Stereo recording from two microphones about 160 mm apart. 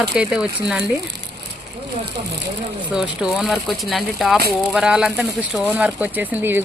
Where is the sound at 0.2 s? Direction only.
5° right (ahead or behind).